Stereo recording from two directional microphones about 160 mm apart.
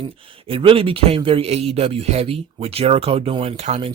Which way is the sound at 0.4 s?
35° right (ahead or behind).